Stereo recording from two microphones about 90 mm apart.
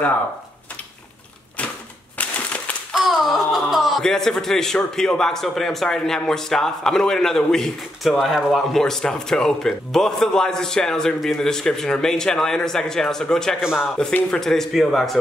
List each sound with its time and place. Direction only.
2.1 s a sound: 15° left (ahead or behind)
3.0 s speech: centre (ahead or behind)
13.6 s speech: 10° right (ahead or behind)
13.9 s speech: 10° left (ahead or behind)